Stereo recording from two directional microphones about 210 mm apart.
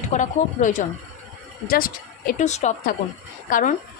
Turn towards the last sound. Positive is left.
turn(degrees=40)  # may be behind; listen again after turning